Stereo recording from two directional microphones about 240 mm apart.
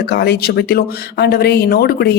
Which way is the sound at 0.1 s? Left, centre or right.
Left.